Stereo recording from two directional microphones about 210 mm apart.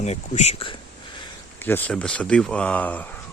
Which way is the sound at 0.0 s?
30° left (ahead or behind).